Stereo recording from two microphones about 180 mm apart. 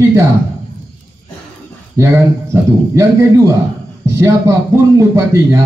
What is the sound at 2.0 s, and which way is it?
A man's voice, 15° right (ahead or behind).